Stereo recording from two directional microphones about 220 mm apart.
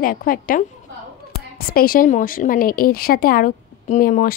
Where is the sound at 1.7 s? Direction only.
40° left (ahead or behind).